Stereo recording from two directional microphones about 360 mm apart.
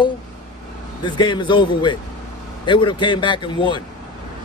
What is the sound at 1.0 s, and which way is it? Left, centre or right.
A man's voice, centre.